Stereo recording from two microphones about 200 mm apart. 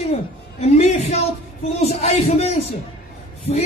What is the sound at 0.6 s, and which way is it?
Speech, 35° left (ahead or behind).